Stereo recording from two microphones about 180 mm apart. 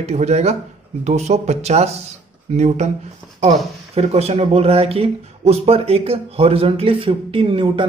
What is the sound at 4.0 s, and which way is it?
Speech, 35° right (ahead or behind).